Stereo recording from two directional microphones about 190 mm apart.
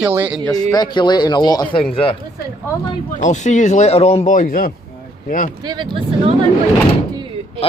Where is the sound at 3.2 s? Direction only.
40° left (ahead or behind).